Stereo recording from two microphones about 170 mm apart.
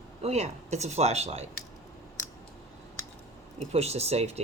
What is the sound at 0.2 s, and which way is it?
Speech, 40° right (ahead or behind).